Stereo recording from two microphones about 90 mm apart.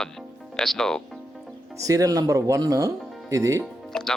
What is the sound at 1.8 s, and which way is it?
Speech, 40° right (ahead or behind).